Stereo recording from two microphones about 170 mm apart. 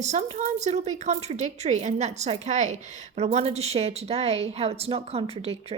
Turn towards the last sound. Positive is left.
turn(degrees=-35)  # may be behind; listen again after turning